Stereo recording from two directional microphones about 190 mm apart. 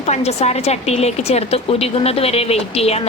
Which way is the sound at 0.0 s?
35° left (ahead or behind).